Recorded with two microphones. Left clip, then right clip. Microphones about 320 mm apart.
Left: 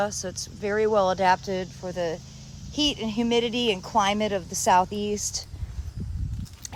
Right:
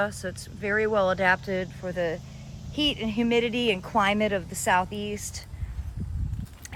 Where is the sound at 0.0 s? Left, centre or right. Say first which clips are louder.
Left 1 dB; centre.